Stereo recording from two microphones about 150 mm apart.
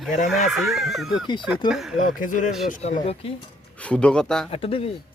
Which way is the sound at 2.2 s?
60° left (ahead or behind).